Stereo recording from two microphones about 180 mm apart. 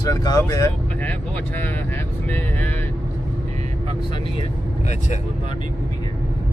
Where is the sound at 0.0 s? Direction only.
20° left (ahead or behind).